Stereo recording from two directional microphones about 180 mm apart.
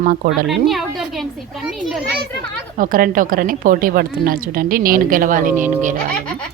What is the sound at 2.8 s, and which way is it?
A woman's voice, 50° right (ahead or behind).